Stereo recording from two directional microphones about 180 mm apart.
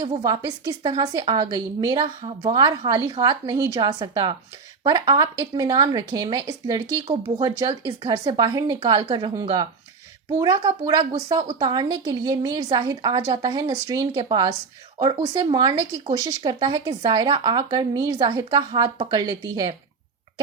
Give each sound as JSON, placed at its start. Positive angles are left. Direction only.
{"t": 0.2, "sound": "speech", "side_deg": -20}